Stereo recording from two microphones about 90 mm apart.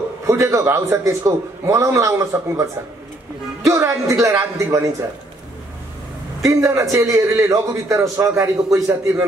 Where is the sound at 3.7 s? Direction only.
35° right (ahead or behind).